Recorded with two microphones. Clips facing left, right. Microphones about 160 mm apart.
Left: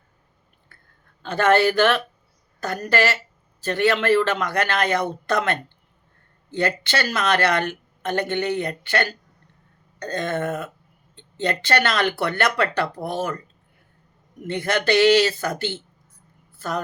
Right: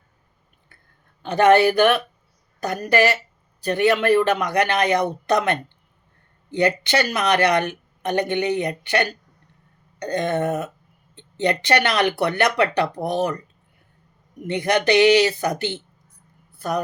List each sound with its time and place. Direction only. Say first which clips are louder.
1.2 s speech: right 3 dB; 15° right (ahead or behind)
14.4 s a woman's voice: right 3 dB; 15° right (ahead or behind)